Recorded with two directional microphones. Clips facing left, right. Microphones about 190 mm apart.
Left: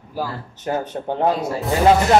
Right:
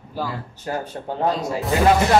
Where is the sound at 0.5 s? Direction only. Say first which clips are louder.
Left 6 dB; 20° left (ahead or behind).